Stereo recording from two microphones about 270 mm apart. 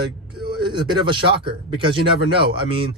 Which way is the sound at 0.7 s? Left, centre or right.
Centre.